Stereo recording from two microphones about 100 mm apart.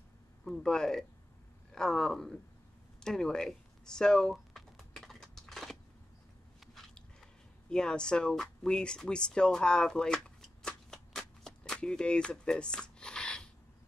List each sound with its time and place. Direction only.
0.5 s speech: 5° left (ahead or behind)
3.0 s typing: 5° left (ahead or behind)
6.6 s biting: centre (ahead or behind)
7.7 s speech: 5° left (ahead or behind)